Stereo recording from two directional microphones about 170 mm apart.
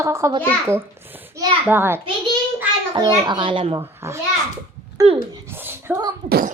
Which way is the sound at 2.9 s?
25° right (ahead or behind).